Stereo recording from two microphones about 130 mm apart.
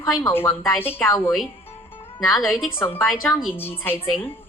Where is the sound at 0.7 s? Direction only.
15° left (ahead or behind).